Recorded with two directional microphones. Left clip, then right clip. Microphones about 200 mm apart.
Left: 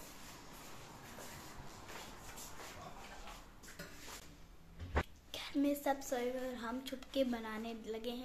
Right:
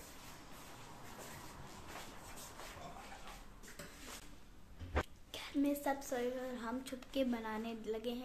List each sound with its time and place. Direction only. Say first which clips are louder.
5.3 s a woman's voice: left 1 dB; 5° right (ahead or behind)